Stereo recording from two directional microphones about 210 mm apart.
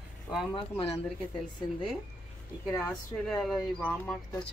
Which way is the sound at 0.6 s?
25° left (ahead or behind).